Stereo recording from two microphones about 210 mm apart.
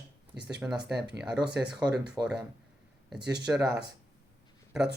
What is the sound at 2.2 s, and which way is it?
Speech, 20° right (ahead or behind).